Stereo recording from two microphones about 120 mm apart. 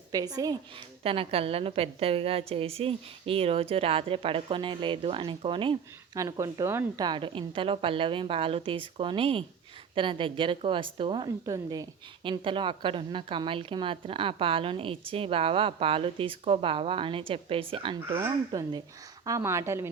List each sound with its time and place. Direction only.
0.1 s a woman's voice: 30° right (ahead or behind)
1.0 s a woman's voice: 50° right (ahead or behind)
6.1 s speech: 30° right (ahead or behind)
7.0 s a woman's voice: 40° right (ahead or behind)
11.4 s speech: 30° right (ahead or behind)
12.2 s a woman's voice: 45° right (ahead or behind)
18.5 s a woman's voice: 35° right (ahead or behind)